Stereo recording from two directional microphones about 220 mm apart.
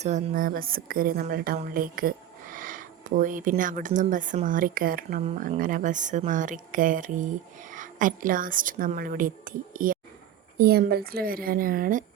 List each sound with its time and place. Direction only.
0.0 s a woman's voice: 35° right (ahead or behind)